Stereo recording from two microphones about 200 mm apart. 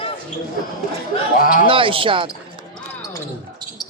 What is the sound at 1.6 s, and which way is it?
Speech, 25° right (ahead or behind).